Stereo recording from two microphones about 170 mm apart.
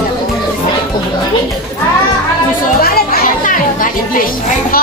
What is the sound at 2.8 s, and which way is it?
Children playing, 60° left (ahead or behind).